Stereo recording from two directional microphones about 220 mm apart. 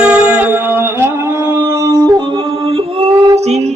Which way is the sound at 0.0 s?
5° right (ahead or behind).